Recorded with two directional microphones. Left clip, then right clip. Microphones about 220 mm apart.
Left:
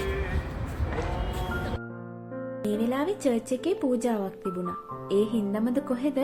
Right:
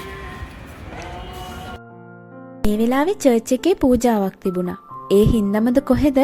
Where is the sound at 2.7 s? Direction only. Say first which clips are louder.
Right 10 dB; 35° right (ahead or behind).